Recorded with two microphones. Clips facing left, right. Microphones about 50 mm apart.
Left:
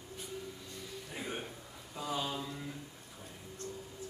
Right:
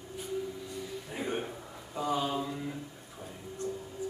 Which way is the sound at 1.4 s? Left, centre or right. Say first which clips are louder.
Right 6 dB; right.